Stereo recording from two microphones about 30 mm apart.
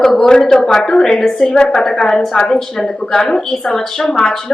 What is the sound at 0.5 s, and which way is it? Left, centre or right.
A woman's voice, centre.